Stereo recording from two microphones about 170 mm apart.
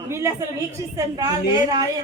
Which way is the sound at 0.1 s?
15° right (ahead or behind).